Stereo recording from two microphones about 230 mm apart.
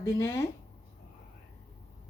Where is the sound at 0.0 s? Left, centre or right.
Centre.